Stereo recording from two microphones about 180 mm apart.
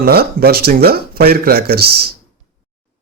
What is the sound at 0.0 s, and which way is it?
Speech, 60° right (ahead or behind).